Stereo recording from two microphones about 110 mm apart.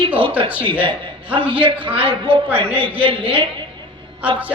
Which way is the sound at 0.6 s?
50° right (ahead or behind).